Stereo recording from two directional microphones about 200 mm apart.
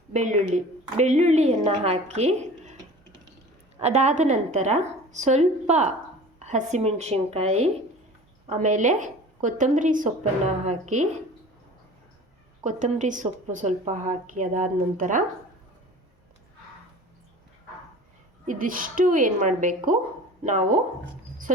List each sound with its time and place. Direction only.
0.1 s a woman's voice: 35° right (ahead or behind)
3.8 s speech: 35° right (ahead or behind)
12.6 s speech: 35° right (ahead or behind)
18.4 s speech: 40° right (ahead or behind)